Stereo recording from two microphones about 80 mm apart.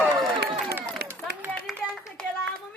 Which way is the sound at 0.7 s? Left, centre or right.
Right.